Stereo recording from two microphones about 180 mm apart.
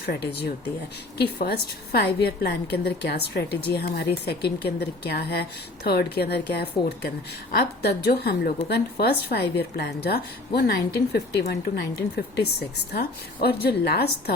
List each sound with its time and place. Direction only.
0.0 s a woman's voice: 65° left (ahead or behind)